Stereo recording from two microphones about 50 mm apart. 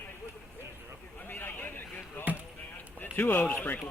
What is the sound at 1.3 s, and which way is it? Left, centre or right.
Speech, left.